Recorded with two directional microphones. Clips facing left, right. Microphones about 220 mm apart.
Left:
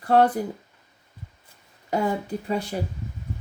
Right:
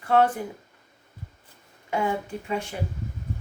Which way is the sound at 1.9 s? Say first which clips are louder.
Left 2 dB; 40° left (ahead or behind).